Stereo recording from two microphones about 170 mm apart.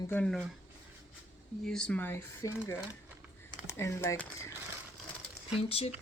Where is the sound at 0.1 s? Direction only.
5° left (ahead or behind).